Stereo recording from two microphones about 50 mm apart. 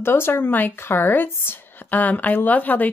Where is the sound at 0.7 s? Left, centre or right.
Left.